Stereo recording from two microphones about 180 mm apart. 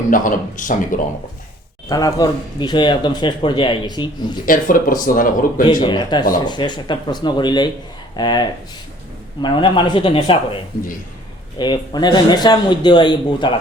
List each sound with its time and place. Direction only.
0.1 s speech: 45° left (ahead or behind)
1.9 s speech: 20° left (ahead or behind)
4.4 s speech: 50° left (ahead or behind)
5.6 s speech: 25° left (ahead or behind)